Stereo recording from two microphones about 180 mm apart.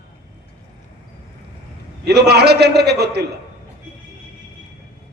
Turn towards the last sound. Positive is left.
turn(degrees=-65)  # may be behind; listen again after turning